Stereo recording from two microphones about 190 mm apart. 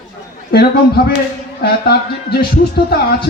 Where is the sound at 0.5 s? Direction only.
55° left (ahead or behind).